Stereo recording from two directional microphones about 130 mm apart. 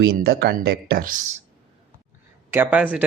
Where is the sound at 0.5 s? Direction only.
90° right.